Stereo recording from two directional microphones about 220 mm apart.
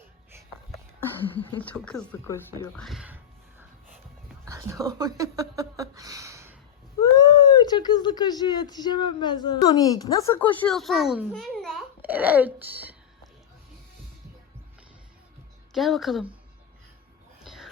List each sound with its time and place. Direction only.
1.4 s speech: 20° left (ahead or behind)
1.6 s speech: 5° left (ahead or behind)
2.8 s speech: centre (ahead or behind)
4.4 s speech: 15° right (ahead or behind)
7.0 s speech: 15° left (ahead or behind); by 13.0 s 10° right (ahead or behind)
15.7 s speech: centre (ahead or behind)
17.4 s a sound: centre (ahead or behind)